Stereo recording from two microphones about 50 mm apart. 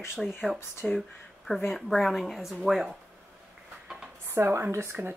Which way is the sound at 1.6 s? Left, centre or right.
Centre.